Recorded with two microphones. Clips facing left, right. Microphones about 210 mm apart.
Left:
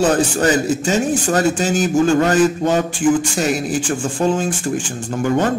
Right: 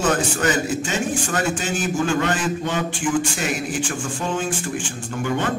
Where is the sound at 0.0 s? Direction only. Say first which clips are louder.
Left 5 dB; 35° left (ahead or behind).